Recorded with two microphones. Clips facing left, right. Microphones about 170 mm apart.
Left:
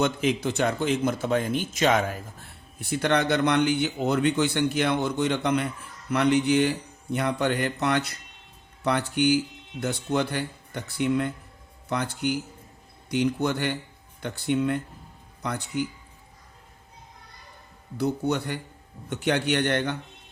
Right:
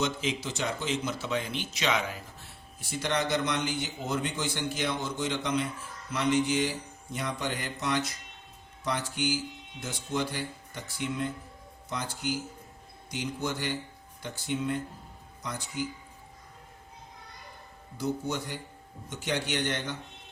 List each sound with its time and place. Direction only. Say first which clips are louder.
0.0 s speech: left 7 dB; 55° left (ahead or behind)
17.9 s speech: left 6 dB; 65° left (ahead or behind)